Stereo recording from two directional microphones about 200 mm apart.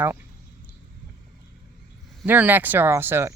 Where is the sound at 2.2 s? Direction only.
10° right (ahead or behind).